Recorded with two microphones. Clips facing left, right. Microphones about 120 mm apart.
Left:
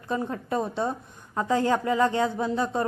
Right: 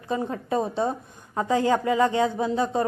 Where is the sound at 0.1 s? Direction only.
30° right (ahead or behind).